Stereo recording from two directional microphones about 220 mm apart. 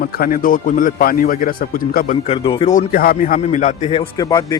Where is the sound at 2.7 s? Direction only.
40° left (ahead or behind).